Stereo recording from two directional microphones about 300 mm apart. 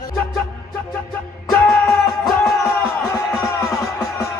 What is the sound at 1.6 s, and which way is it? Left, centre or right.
Music, centre.